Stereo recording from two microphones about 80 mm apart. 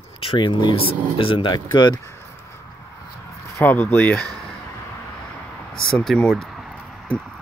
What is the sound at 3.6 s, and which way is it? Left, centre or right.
Speech, left.